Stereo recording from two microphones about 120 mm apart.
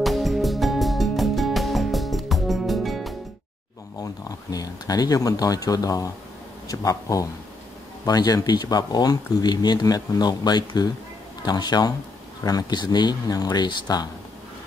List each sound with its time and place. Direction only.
0.0 s music: centre (ahead or behind)
4.0 s speech: 30° left (ahead or behind)